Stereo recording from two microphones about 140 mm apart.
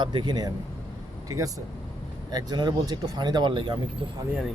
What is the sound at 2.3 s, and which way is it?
Speech, 30° right (ahead or behind).